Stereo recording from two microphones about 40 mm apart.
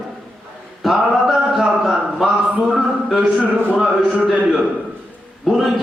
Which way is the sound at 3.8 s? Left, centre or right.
Centre.